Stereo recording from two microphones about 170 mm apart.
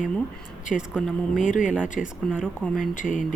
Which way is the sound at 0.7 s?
5° right (ahead or behind).